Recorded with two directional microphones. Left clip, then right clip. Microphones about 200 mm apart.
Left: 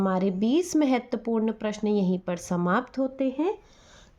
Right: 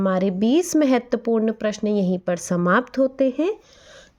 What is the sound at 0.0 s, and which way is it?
A woman's voice, 35° right (ahead or behind).